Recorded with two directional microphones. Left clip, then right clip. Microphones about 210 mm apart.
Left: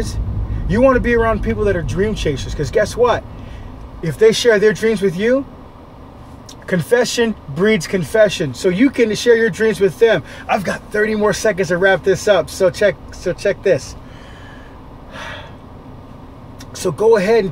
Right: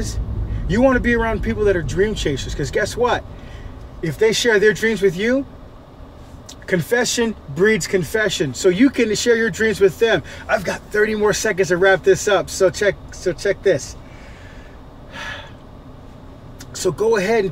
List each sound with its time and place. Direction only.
0.7 s speech: 5° left (ahead or behind)
6.6 s speech: 5° left (ahead or behind)
16.7 s speech: centre (ahead or behind)